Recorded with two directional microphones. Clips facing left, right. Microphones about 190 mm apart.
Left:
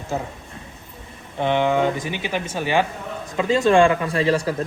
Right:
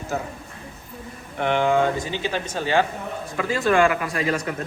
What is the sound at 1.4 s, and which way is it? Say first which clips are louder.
Speech: left 1 dB; 20° left (ahead or behind).